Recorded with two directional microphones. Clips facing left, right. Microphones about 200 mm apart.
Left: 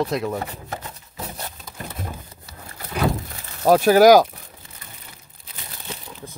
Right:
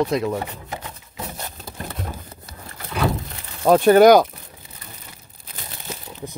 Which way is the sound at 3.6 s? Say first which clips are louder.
Right 1 dB; 5° left (ahead or behind).